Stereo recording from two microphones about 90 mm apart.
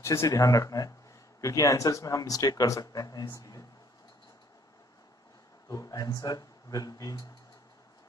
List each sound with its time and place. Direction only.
0.0 s speech: 30° left (ahead or behind)
3.3 s a sound: 45° left (ahead or behind)
5.7 s speech: 40° left (ahead or behind)